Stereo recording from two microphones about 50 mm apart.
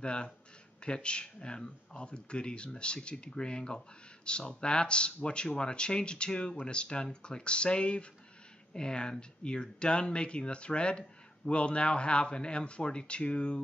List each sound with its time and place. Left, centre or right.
0.0 s speech: centre